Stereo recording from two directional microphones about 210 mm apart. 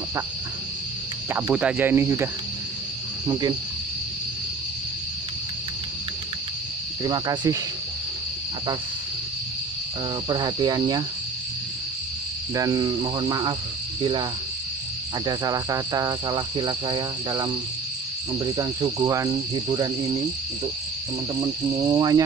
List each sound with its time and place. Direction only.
1.3 s cricket: 5° right (ahead or behind)
3.3 s cricket: 20° right (ahead or behind)
7.0 s cricket: 20° right (ahead or behind)
10.2 s cricket: 20° right (ahead or behind)
12.5 s cricket: 15° right (ahead or behind)
15.2 s cricket: 15° right (ahead or behind)
21.4 s cricket: 15° right (ahead or behind)